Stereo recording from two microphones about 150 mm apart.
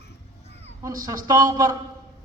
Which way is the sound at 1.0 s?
25° right (ahead or behind).